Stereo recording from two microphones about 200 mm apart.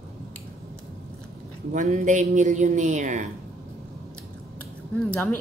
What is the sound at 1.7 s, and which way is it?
A woman's voice, 40° right (ahead or behind).